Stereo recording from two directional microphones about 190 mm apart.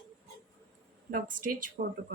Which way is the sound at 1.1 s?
45° right (ahead or behind).